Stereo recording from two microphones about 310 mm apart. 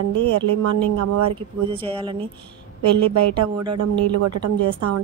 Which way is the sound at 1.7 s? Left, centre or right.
Centre.